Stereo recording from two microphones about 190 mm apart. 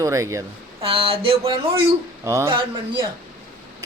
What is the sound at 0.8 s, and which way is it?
Speech, 30° right (ahead or behind).